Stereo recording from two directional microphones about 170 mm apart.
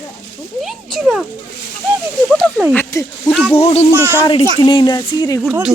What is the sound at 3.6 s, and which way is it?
Speech, 35° left (ahead or behind).